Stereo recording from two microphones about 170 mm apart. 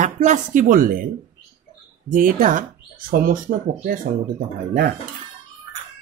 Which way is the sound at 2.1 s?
55° right (ahead or behind).